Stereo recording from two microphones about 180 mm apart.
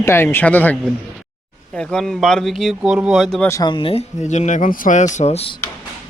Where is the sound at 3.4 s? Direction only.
20° left (ahead or behind); by 5.1 s 45° left (ahead or behind).